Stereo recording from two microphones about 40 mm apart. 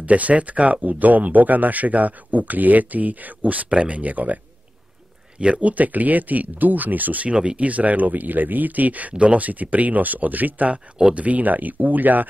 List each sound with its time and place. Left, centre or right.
0.0 s speech: right
5.4 s speech: right
7.3 s speech: right
9.1 s speech: right
9.4 s speech: right